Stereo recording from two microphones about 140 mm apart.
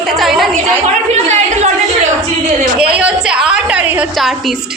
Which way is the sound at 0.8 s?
55° right (ahead or behind).